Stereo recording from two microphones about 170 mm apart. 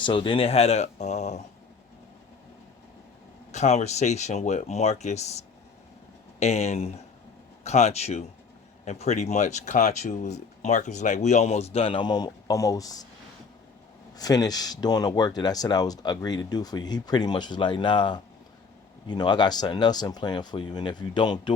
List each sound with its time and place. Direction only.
0.0 s speech: 30° left (ahead or behind)
3.5 s speech: 40° left (ahead or behind); by 13.1 s 20° left (ahead or behind)
14.2 s speech: 20° left (ahead or behind)